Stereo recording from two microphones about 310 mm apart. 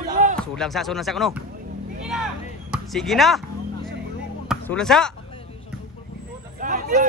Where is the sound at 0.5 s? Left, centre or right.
Centre.